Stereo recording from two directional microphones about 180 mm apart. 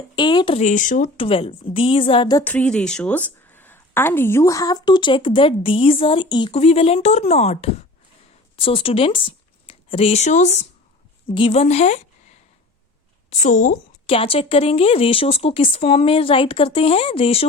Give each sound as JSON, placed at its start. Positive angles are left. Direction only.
{"t": 0.2, "sound": "a woman's voice", "side_deg": 25}
{"t": 0.6, "sound": "speech", "side_deg": 45}
{"t": 1.1, "sound": "a woman's voice", "side_deg": 30}
{"t": 2.4, "sound": "a woman's voice", "side_deg": 10}
{"t": 13.4, "sound": "speech", "side_deg": 45}
{"t": 14.1, "sound": "speech", "side_deg": 30}